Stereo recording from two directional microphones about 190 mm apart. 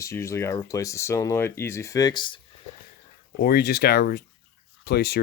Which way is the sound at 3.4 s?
55° left (ahead or behind).